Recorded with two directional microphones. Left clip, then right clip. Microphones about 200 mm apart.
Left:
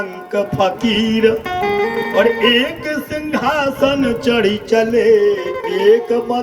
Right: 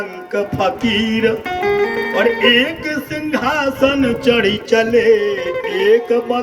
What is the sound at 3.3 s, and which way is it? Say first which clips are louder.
Speech: even; 65° left (ahead or behind).